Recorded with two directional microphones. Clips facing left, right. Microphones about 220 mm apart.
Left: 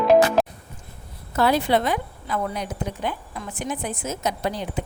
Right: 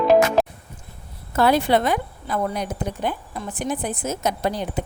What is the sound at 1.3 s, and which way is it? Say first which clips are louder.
A woman's voice: right 2 dB; 50° right (ahead or behind).